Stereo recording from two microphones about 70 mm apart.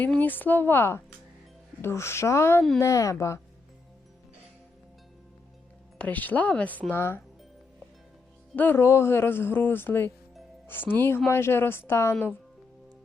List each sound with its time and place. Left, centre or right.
0.0 s speech: left
6.0 s speech: left
6.9 s speech: left
8.5 s speech: left
8.8 s speech: left